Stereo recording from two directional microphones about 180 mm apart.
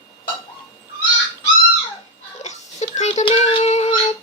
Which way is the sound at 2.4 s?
40° left (ahead or behind).